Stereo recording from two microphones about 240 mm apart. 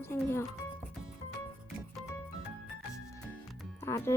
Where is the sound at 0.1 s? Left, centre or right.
Centre.